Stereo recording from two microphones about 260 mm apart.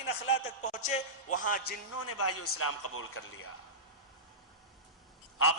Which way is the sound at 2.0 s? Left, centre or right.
Left.